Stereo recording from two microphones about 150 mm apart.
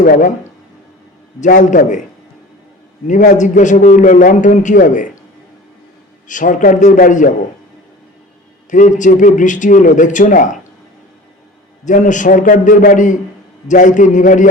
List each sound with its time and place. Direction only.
0.0 s a man's voice: 60° left (ahead or behind)
1.4 s a man's voice: 55° left (ahead or behind)
3.1 s a man's voice: 55° left (ahead or behind)
6.2 s a man's voice: 60° left (ahead or behind)
8.7 s a man's voice: 60° left (ahead or behind)
11.9 s a man's voice: 55° left (ahead or behind)